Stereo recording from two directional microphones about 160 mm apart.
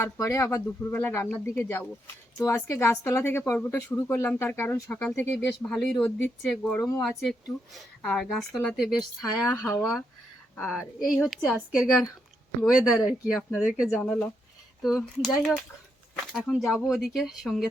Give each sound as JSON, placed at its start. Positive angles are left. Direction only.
{"t": 0.0, "sound": "speech", "side_deg": 20}
{"t": 7.0, "sound": "speech", "side_deg": 0}